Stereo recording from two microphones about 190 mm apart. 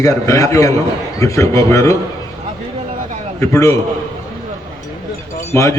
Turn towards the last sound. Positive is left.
turn(degrees=15)  # may be behind; listen again after turning